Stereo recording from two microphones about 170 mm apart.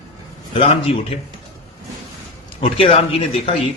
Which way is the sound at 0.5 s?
35° left (ahead or behind).